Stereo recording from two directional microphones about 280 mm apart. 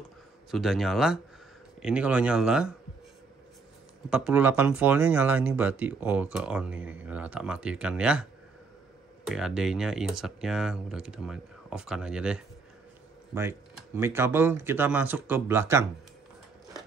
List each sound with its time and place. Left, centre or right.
0.5 s speech: centre
4.1 s speech: centre